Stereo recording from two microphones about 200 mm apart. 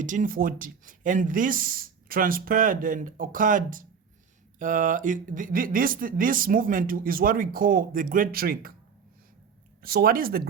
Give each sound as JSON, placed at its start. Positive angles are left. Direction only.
{"t": 0.0, "sound": "speech", "side_deg": -40}
{"t": 9.8, "sound": "speech", "side_deg": -50}